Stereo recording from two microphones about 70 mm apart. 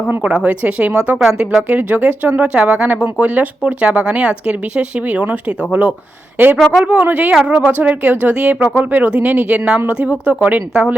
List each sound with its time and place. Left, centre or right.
0.3 s speech: centre
1.2 s speech: centre